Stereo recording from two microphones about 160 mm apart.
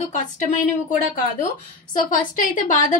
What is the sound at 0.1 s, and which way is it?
Speech, 50° left (ahead or behind).